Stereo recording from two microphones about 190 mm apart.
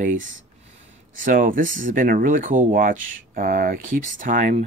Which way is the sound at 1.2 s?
45° right (ahead or behind).